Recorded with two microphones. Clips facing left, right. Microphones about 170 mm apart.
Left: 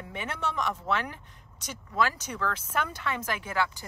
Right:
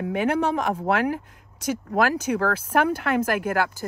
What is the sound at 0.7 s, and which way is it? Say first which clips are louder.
Speech: right 8 dB; 55° right (ahead or behind).